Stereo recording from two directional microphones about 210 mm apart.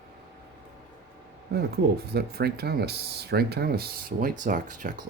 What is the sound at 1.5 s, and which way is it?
Speech, 50° right (ahead or behind).